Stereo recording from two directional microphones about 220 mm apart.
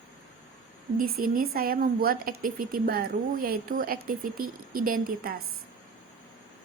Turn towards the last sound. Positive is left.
turn(degrees=-45)  # may be behind; listen again after turning